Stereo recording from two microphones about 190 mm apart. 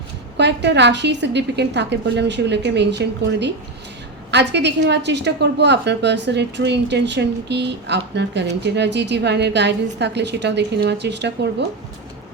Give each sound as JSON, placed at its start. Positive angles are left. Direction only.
{"t": 0.3, "sound": "a woman's voice", "side_deg": -65}